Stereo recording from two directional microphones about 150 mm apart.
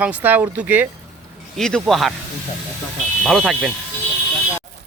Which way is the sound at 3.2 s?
Centre (ahead or behind).